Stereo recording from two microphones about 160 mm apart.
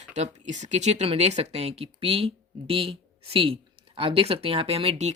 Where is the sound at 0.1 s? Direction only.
45° right (ahead or behind).